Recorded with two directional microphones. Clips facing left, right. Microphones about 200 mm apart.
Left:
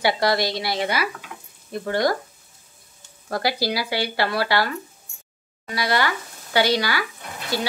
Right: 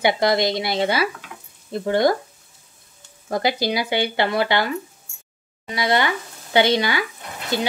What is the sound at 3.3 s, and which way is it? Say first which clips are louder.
Speech: right 2 dB; 20° right (ahead or behind).